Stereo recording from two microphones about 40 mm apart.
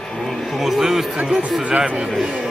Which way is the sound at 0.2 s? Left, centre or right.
Centre.